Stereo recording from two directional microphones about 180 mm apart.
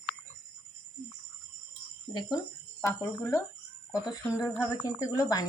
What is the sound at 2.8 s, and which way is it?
Speech, 15° left (ahead or behind).